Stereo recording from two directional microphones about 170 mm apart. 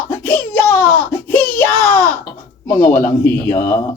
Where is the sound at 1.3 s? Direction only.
55° left (ahead or behind).